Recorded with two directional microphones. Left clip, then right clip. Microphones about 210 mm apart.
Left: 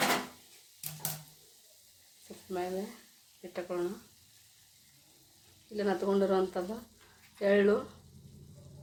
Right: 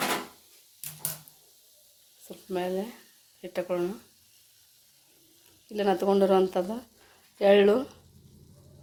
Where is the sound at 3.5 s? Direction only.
45° right (ahead or behind).